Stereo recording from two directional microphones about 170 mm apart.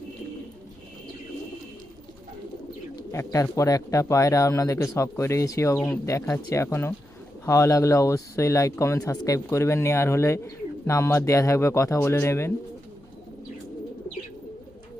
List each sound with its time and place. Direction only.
3.1 s speech: 20° left (ahead or behind)
5.7 s speech: 5° left (ahead or behind)
6.1 s speech: 20° left (ahead or behind)